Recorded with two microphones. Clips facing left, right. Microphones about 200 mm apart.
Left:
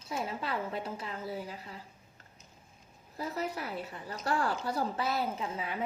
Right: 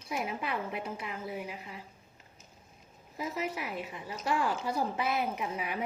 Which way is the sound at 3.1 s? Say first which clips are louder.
Even; 10° right (ahead or behind).